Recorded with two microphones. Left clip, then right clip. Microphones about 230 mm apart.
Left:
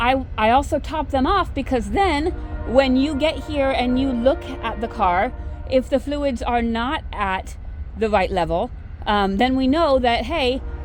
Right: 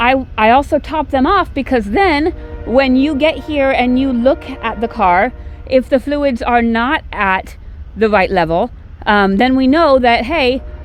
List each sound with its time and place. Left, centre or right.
0.0 s a woman's voice: right